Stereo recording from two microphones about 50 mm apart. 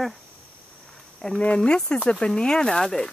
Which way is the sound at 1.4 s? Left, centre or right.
Left.